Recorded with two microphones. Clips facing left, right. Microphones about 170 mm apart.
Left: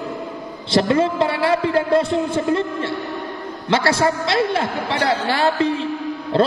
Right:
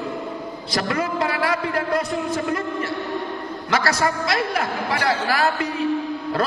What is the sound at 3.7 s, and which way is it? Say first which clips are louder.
A man's voice: left 4 dB; 25° left (ahead or behind).